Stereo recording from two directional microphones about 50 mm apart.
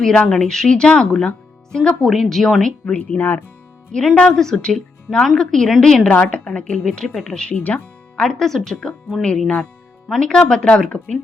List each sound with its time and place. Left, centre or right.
0.0 s speech: centre
2.0 s speech: centre
2.9 s a woman's voice: left
3.2 s speech: left
3.9 s speech: centre
6.1 s a woman's voice: left
8.1 s speech: centre
10.2 s a woman's voice: centre